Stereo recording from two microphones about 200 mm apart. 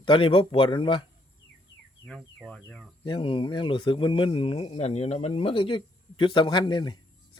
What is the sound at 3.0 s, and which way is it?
Speech, 25° left (ahead or behind).